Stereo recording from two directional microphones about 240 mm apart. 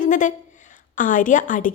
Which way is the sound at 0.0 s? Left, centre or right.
Left.